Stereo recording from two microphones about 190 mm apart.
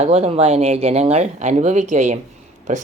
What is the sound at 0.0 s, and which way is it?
Speech, 35° right (ahead or behind).